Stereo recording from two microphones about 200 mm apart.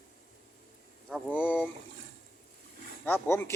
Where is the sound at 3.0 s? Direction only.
10° left (ahead or behind).